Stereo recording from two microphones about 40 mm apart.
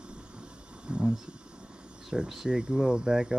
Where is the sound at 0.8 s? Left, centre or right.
Right.